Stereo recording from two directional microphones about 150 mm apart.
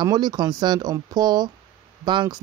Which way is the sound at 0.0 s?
30° right (ahead or behind).